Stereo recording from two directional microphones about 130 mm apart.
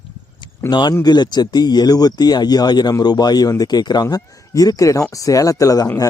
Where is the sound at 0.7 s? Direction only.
35° left (ahead or behind).